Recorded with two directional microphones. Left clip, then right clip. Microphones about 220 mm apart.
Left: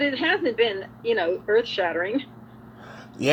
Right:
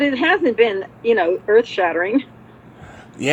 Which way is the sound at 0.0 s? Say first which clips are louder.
Right 6 dB; 20° right (ahead or behind).